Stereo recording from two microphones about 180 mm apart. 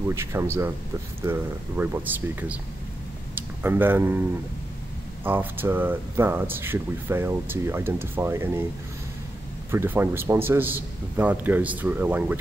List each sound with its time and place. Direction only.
0.1 s speech: 15° right (ahead or behind)
5.2 s speech: 10° right (ahead or behind)
9.7 s speech: 15° right (ahead or behind)